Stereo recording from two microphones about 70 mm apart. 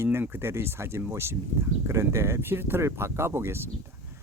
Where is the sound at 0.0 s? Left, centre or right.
Right.